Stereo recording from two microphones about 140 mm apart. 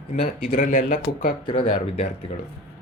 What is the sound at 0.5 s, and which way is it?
Speech, 80° left.